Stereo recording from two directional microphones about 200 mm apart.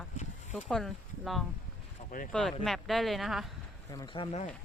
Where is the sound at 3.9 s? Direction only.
20° left (ahead or behind).